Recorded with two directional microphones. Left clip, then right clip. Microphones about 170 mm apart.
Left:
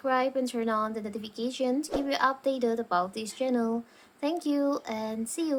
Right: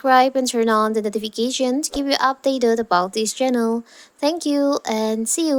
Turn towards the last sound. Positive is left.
turn(degrees=-45)  # may be behind; listen again after turning